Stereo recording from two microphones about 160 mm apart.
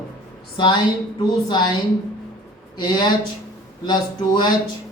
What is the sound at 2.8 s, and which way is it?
A man's voice, 25° left (ahead or behind).